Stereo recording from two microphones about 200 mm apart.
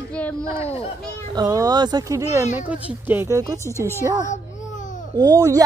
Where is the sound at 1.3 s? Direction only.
20° right (ahead or behind).